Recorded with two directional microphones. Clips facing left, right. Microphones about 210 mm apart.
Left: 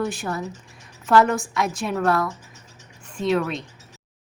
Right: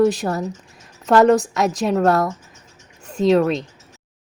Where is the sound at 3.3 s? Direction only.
40° right (ahead or behind).